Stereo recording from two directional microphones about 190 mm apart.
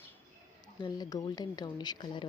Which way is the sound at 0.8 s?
20° left (ahead or behind).